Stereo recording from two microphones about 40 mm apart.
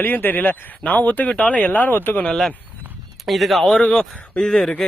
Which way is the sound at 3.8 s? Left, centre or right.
Centre.